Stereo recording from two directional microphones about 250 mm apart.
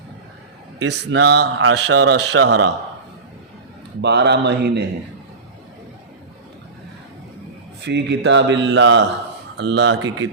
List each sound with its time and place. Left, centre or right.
0.8 s speech: right
4.0 s speech: right
7.9 s speech: right